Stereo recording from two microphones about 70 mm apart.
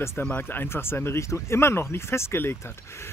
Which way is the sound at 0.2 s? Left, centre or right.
Left.